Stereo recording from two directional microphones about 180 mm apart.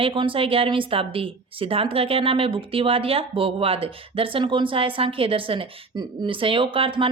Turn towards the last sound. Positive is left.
turn(degrees=-30)  # may be behind; listen again after turning